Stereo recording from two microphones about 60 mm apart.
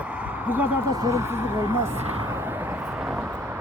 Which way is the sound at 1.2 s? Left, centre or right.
Right.